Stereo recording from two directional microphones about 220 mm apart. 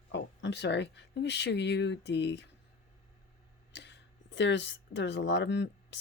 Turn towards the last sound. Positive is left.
turn(degrees=50)  # may be behind; listen again after turning